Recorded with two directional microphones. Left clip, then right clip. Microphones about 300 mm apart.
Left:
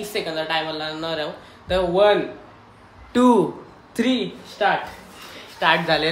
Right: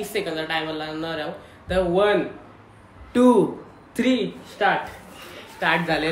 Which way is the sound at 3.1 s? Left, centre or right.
Centre.